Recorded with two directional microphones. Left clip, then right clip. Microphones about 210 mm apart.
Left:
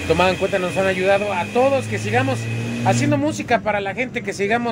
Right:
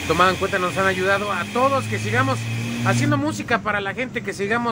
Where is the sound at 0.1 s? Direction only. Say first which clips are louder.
Left 1 dB; 5° right (ahead or behind).